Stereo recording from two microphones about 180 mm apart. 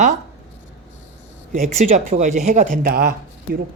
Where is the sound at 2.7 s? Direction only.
55° right (ahead or behind).